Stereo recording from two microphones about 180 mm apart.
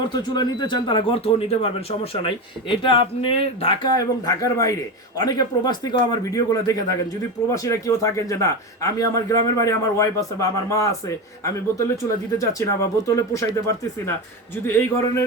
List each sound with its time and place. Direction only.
0.0 s speech: 25° left (ahead or behind)
14.5 s speech: 15° left (ahead or behind)